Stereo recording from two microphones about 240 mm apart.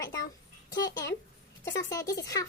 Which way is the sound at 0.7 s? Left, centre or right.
Centre.